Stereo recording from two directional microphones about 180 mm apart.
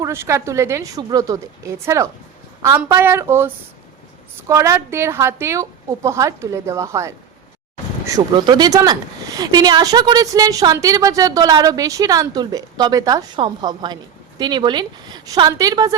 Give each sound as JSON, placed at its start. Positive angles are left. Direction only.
{"t": 0.0, "sound": "a woman's voice", "side_deg": -15}